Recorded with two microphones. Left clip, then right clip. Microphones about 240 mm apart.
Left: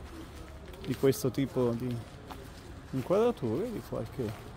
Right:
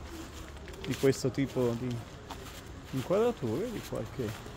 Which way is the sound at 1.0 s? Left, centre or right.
Centre.